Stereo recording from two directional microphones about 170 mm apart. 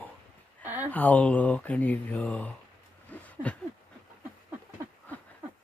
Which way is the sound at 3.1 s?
10° left (ahead or behind).